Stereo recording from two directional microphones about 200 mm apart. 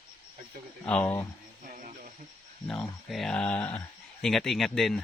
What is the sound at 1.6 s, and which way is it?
Music, 40° right (ahead or behind).